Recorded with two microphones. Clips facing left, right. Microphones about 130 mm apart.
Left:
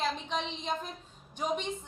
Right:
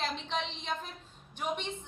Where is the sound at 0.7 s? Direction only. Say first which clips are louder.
Left 2 dB; 40° left (ahead or behind).